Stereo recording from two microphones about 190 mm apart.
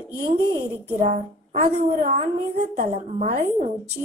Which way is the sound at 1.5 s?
40° right (ahead or behind).